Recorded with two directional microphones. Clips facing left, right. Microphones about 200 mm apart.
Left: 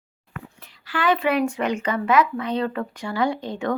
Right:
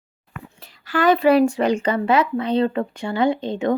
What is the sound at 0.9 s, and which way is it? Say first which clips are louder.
Speech: right 6 dB; 40° right (ahead or behind).